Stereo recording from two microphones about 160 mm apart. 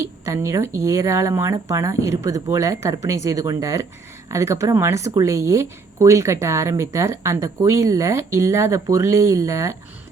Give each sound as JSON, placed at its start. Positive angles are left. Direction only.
{"t": 0.0, "sound": "speech", "side_deg": -20}